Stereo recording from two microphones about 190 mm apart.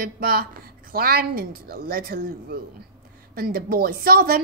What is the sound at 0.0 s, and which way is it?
A woman's voice, 50° right (ahead or behind).